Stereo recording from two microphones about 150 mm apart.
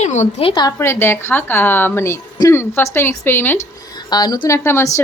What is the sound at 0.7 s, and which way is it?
Speech, 15° left (ahead or behind).